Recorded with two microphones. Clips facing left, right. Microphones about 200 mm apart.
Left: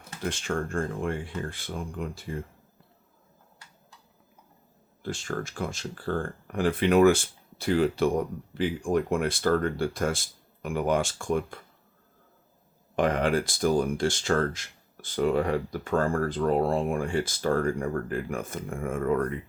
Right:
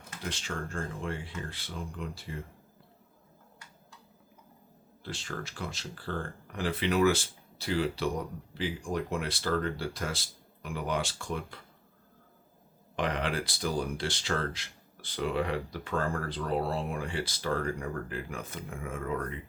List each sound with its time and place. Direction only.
0.2 s speech: 50° left (ahead or behind)
5.0 s speech: 50° left (ahead or behind)
13.0 s speech: 45° left (ahead or behind)